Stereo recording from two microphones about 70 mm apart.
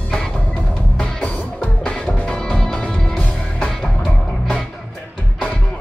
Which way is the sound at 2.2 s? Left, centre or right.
Centre.